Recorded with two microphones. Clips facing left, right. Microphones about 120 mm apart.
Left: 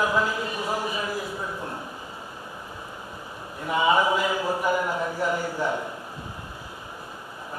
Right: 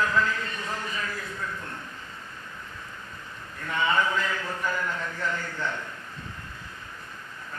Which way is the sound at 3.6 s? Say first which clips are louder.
Left 5 dB; 15° left (ahead or behind).